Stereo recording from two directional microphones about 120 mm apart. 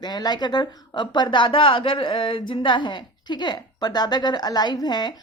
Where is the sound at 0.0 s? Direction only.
35° left (ahead or behind).